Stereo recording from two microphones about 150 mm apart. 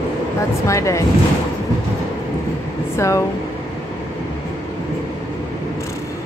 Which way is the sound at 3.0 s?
20° left (ahead or behind).